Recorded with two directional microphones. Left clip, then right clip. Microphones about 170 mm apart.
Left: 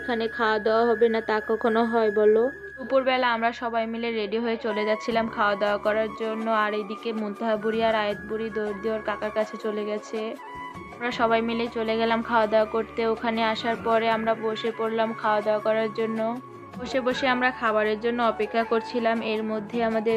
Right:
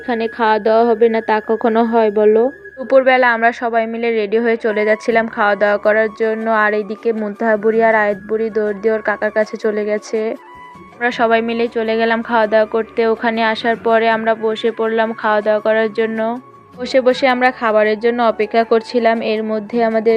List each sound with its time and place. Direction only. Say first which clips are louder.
0.1 s speech: right 9 dB; 35° right (ahead or behind)